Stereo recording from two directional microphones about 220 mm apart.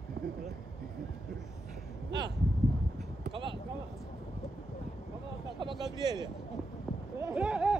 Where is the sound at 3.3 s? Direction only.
20° right (ahead or behind).